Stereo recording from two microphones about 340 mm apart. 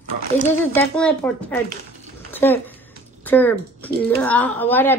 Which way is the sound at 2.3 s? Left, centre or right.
Centre.